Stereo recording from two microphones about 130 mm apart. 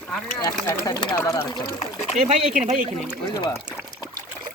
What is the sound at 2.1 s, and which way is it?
Speech, 70° right (ahead or behind).